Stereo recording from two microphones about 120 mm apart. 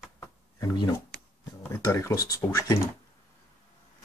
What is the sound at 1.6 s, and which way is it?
Speech, 20° left (ahead or behind).